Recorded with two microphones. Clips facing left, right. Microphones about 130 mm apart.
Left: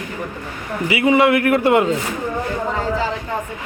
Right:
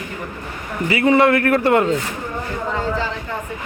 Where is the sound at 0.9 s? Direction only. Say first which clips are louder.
Even; 15° left (ahead or behind).